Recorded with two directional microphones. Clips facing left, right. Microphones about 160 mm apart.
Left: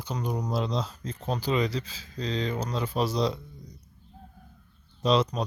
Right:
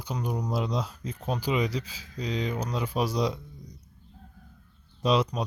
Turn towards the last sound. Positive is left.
turn(degrees=-10)  # may be behind; listen again after turning